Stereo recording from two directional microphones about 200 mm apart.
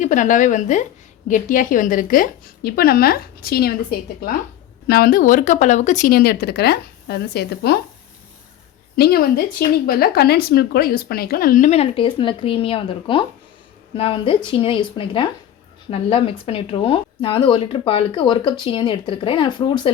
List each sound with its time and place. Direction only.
0.0 s speech: 40° left (ahead or behind)
9.0 s speech: 50° left (ahead or behind); by 19.9 s 25° left (ahead or behind)